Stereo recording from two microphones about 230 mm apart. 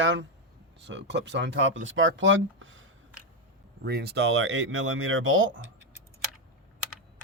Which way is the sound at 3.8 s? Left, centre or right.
Right.